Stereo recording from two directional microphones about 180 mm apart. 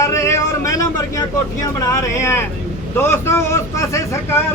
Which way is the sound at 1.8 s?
15° left (ahead or behind).